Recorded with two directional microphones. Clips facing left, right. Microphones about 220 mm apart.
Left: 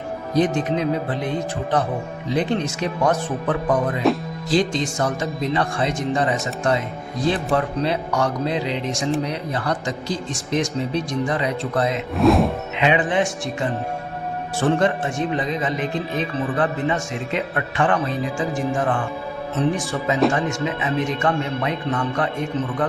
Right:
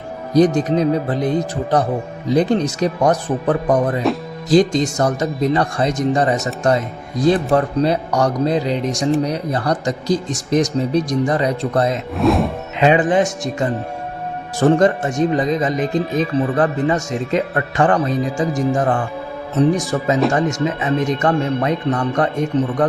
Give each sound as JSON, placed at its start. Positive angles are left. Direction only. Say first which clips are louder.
{"t": 0.3, "sound": "speech", "louder": "right 6 dB", "side_deg": -40}
{"t": 12.1, "sound": "speech", "louder": "left 1 dB", "side_deg": 0}
{"t": 12.7, "sound": "a man's voice", "louder": "right 7 dB", "side_deg": -40}